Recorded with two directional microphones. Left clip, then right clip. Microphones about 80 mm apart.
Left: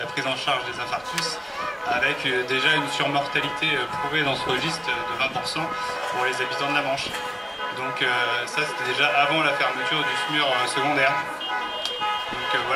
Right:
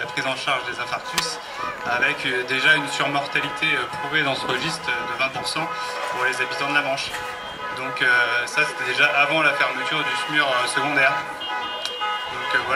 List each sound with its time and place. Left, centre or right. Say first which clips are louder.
0.2 s speech: right 1 dB; right
1.9 s speech: right 1 dB; right